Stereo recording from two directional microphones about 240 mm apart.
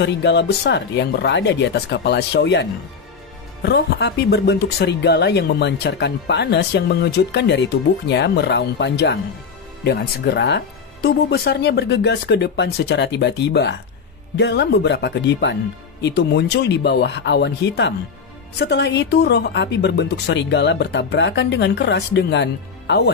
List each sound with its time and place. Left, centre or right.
0.0 s speech: left